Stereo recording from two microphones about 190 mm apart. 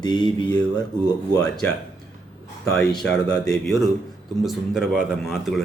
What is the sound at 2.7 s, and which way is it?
Speech, 5° left (ahead or behind).